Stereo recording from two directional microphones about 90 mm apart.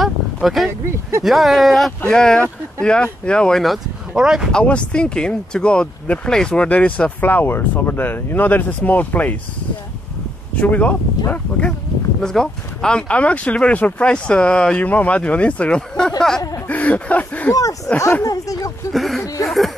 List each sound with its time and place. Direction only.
0.0 s a sound: centre (ahead or behind)
1.2 s speech: centre (ahead or behind)
4.5 s speech: 10° left (ahead or behind)
10.6 s speech: 15° left (ahead or behind)
12.2 s speech: 5° left (ahead or behind)
17.5 s speech: 40° left (ahead or behind)
18.9 s speech: centre (ahead or behind)
19.4 s a sound: centre (ahead or behind)